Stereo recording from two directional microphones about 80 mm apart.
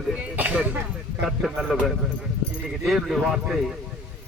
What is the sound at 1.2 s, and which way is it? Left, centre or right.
Speech, centre.